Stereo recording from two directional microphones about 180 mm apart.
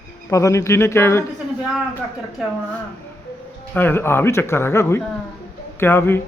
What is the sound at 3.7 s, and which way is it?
Speech, 10° left (ahead or behind).